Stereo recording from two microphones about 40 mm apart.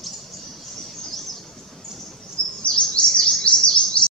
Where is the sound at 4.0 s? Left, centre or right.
Left.